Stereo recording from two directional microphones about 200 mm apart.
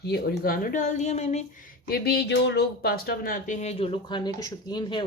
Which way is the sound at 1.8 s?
50° left (ahead or behind).